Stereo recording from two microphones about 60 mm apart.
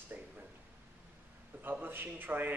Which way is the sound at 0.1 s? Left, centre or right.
Right.